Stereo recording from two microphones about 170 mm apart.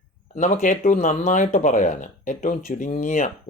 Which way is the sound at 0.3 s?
45° left (ahead or behind).